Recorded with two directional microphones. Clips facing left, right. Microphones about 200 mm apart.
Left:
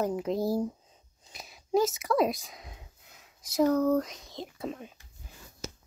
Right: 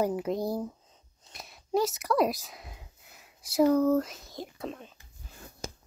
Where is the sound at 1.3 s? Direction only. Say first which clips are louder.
Left 2 dB; centre (ahead or behind).